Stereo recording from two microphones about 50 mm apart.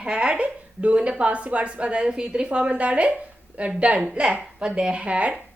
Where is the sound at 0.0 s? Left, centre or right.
Centre.